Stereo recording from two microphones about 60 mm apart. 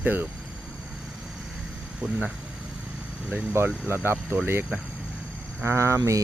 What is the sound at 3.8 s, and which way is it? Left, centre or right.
Speech, right.